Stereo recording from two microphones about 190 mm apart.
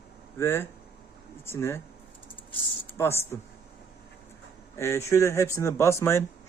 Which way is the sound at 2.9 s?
15° left (ahead or behind).